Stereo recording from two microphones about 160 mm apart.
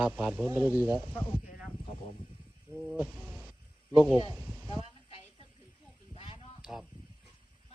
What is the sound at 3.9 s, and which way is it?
Speech, 10° right (ahead or behind).